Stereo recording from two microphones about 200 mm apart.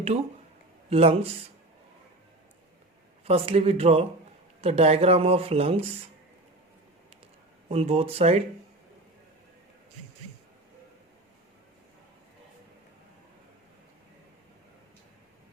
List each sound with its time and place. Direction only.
0.9 s speech: 30° right (ahead or behind)
3.2 s speech: 30° right (ahead or behind)
7.7 s speech: 30° right (ahead or behind)